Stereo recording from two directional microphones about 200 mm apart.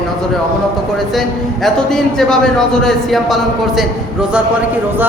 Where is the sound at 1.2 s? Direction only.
Centre (ahead or behind).